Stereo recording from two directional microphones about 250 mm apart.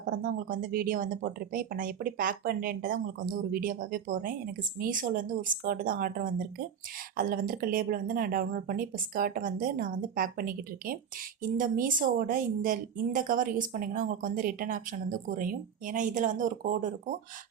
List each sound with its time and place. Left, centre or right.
0.2 s speech: right